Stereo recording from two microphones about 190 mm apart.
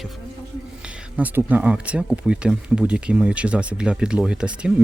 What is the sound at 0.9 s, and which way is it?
Speech, 10° right (ahead or behind).